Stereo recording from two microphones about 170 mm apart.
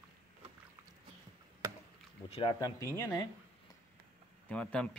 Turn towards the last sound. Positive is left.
turn(degrees=10)  # may be behind; listen again after turning